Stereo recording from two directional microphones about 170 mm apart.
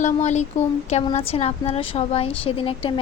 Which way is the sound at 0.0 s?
40° left (ahead or behind).